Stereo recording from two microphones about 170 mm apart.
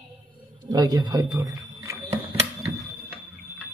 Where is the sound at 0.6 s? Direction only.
25° right (ahead or behind).